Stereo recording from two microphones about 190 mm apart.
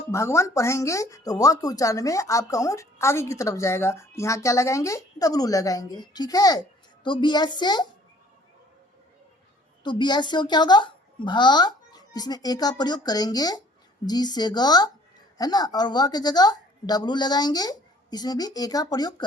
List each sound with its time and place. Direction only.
0.1 s speech: 15° left (ahead or behind)
9.8 s speech: 25° left (ahead or behind)